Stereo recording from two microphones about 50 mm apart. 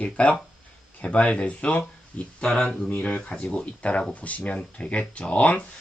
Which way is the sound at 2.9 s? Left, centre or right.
Left.